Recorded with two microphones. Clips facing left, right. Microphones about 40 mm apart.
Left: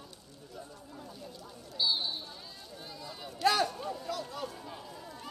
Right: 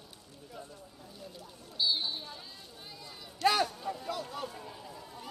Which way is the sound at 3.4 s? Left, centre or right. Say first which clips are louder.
Even; centre.